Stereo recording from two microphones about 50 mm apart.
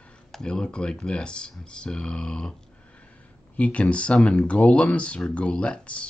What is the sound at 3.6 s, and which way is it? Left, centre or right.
Speech, left.